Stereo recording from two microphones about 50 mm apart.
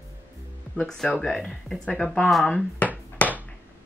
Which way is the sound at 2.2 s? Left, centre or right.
Centre.